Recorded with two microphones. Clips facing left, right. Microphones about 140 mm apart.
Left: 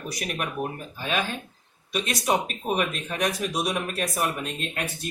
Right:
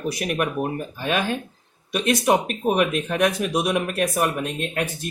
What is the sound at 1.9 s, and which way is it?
Speech, 55° right (ahead or behind).